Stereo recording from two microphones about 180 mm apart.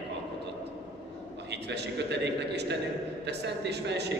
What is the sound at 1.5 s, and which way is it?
A man's voice, 70° right (ahead or behind).